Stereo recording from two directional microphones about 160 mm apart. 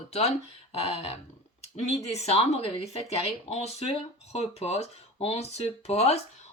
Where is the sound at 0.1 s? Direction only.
40° left (ahead or behind).